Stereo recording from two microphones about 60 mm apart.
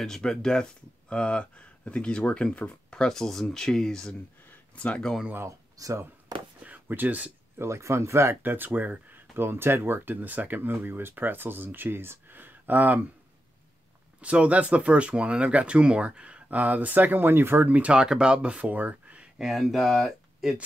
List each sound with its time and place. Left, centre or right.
0.0 s speech: centre
5.8 s speech: right
6.6 s a sound: right
7.5 s speech: right
8.4 s speech: right
9.4 s speech: right
14.2 s speech: right
17.9 s speech: centre
19.3 s speech: centre